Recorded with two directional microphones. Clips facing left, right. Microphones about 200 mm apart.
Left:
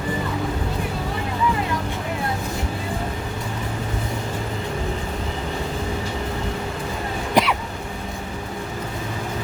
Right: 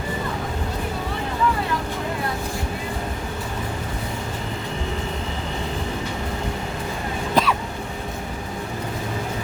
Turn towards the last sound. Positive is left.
turn(degrees=15)  # may be behind; listen again after turning